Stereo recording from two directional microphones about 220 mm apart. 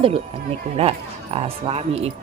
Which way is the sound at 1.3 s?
25° right (ahead or behind).